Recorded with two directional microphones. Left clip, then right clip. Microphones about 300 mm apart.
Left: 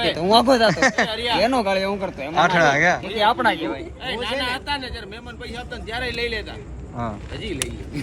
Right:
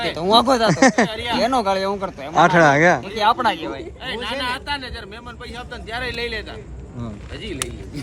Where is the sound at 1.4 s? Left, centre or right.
Right.